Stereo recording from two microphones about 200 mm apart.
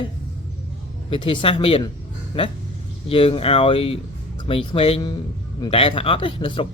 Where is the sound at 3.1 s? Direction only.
30° left (ahead or behind).